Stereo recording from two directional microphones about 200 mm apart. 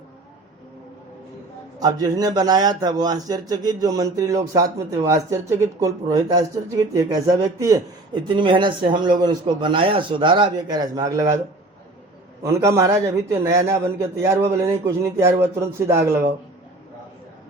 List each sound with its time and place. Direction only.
1.8 s a man's voice: 20° right (ahead or behind)
12.4 s a man's voice: 15° right (ahead or behind)